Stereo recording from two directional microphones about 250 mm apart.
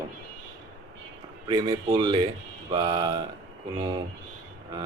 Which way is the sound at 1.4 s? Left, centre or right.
Centre.